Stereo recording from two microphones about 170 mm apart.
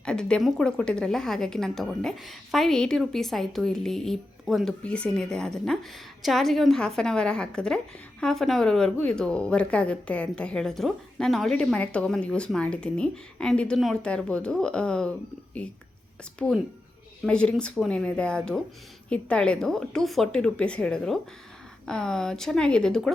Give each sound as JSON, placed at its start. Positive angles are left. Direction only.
{"t": 0.0, "sound": "a woman's voice", "side_deg": 5}
{"t": 16.4, "sound": "a woman's voice", "side_deg": 5}